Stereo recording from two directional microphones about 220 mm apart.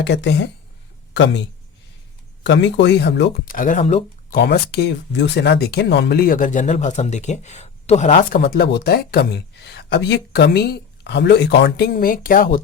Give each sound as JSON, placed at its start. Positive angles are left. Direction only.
{"t": 0.0, "sound": "speech", "side_deg": 50}
{"t": 2.4, "sound": "speech", "side_deg": 55}
{"t": 3.4, "sound": "speech", "side_deg": 40}
{"t": 4.4, "sound": "speech", "side_deg": 50}